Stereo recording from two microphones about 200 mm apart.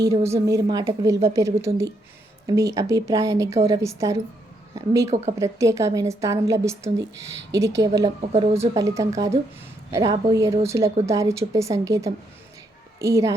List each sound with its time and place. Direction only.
0.0 s a woman's voice: 15° right (ahead or behind)
5.4 s a woman's voice: 15° right (ahead or behind)